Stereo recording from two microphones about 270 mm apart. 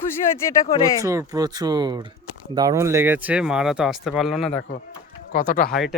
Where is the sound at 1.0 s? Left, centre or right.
Centre.